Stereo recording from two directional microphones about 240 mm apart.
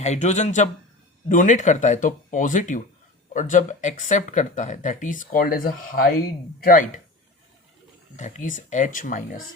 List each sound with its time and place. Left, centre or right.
0.0 s speech: left
8.1 s speech: left